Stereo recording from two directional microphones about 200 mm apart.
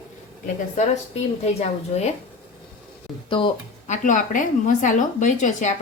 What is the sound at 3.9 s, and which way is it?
A woman's voice, 40° left (ahead or behind).